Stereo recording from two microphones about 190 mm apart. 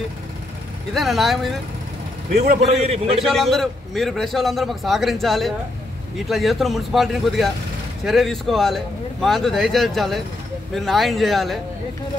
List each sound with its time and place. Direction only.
0.9 s a man's voice: centre (ahead or behind)
2.4 s a man's voice: 35° right (ahead or behind)
3.3 s a man's voice: centre (ahead or behind)